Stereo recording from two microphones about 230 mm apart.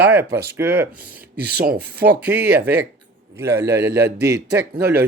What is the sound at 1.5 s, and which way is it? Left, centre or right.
Speech, right.